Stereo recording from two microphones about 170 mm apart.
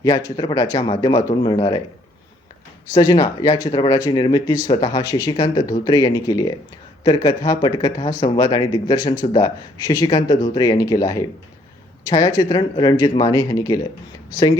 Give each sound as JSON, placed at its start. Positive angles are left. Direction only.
{"t": 0.3, "sound": "speech", "side_deg": 20}
{"t": 2.9, "sound": "speech", "side_deg": 25}